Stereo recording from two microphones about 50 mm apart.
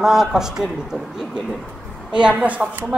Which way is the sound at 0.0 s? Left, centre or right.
Centre.